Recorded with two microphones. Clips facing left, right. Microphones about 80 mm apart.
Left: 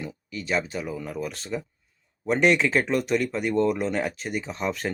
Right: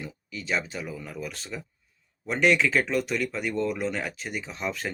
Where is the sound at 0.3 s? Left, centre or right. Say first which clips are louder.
Left 3 dB; left.